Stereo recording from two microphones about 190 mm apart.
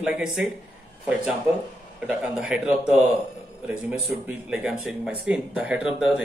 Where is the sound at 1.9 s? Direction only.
5° right (ahead or behind).